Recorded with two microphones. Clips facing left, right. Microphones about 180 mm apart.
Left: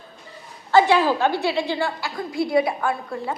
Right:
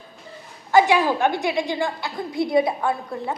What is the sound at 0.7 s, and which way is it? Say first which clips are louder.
A woman's voice: even; 15° right (ahead or behind).